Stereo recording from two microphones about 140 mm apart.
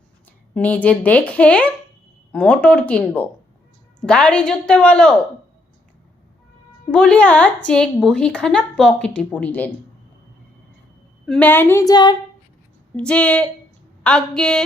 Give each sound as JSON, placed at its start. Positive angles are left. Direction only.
{"t": 0.5, "sound": "a woman's voice", "side_deg": 10}
{"t": 6.9, "sound": "a woman's voice", "side_deg": 5}
{"t": 11.3, "sound": "a woman's voice", "side_deg": 10}
{"t": 13.0, "sound": "a woman's voice", "side_deg": 10}